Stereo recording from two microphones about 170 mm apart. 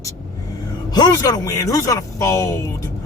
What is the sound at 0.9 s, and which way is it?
Speech, 25° left (ahead or behind).